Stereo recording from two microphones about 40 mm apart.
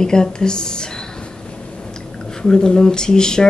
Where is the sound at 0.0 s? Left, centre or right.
Centre.